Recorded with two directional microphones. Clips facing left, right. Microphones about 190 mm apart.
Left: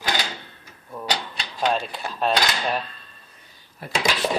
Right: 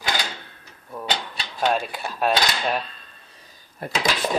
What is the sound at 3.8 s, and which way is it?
Speech, 50° right (ahead or behind).